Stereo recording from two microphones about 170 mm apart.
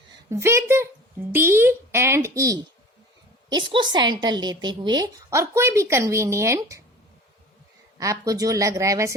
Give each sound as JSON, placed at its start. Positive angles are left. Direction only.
{"t": 0.3, "sound": "speech", "side_deg": -15}
{"t": 3.7, "sound": "a woman's voice", "side_deg": -25}
{"t": 7.9, "sound": "a woman's voice", "side_deg": -20}